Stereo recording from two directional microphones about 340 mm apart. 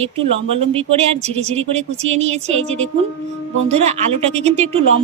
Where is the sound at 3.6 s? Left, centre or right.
Centre.